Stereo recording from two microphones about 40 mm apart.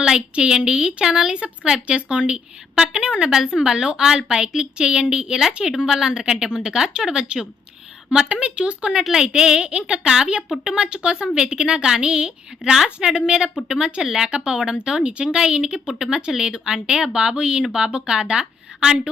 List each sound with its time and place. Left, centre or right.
0.0 s a woman's voice: right
8.3 s a woman's voice: right
14.0 s a woman's voice: centre
14.3 s a woman's voice: right